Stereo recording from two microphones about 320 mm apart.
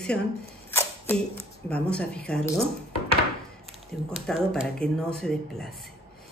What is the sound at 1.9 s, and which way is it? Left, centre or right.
Speech, centre.